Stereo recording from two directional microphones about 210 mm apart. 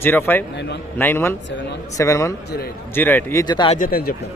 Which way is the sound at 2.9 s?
10° left (ahead or behind).